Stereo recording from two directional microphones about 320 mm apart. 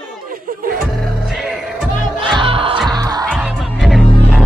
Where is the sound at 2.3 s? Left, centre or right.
Centre.